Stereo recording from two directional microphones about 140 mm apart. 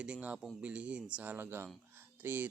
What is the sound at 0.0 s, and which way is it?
Speech, 10° right (ahead or behind).